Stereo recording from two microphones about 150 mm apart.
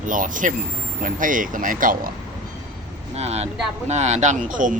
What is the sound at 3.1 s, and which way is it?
Speech, 45° right (ahead or behind).